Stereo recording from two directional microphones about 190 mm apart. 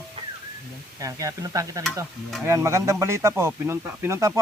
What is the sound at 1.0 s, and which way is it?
A man's voice, 15° right (ahead or behind).